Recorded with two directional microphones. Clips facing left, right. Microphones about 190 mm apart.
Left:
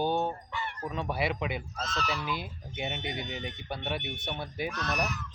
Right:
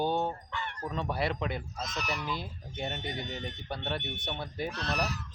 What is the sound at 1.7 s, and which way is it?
Speech, 15° right (ahead or behind).